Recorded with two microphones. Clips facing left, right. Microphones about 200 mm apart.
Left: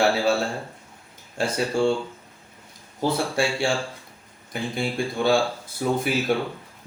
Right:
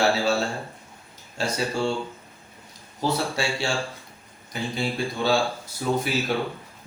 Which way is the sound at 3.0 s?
55° left (ahead or behind).